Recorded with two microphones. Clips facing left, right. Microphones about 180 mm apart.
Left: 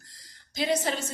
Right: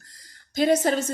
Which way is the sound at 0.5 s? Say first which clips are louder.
Right 7 dB; 45° right (ahead or behind).